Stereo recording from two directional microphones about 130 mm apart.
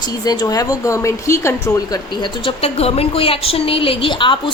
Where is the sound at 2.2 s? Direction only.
40° left (ahead or behind).